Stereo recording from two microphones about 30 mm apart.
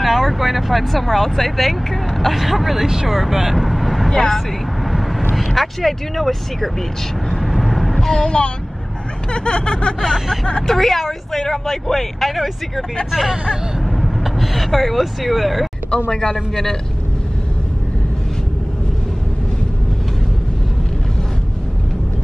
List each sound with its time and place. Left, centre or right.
0.0 s speech: centre
4.1 s speech: centre
5.3 s speech: centre
7.5 s vehicle: centre
8.0 s speech: centre
9.3 s snicker: left
10.1 s speech: centre
13.1 s speech: centre
15.9 s a man's voice: left